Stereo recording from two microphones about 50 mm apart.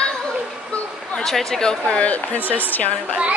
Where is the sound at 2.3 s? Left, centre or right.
Left.